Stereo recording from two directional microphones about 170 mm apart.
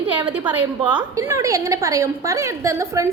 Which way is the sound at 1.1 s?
20° right (ahead or behind).